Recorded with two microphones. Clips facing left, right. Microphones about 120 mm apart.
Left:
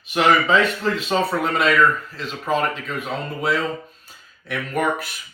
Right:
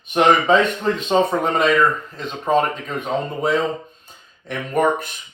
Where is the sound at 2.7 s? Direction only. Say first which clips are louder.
Right 2 dB; 45° right (ahead or behind).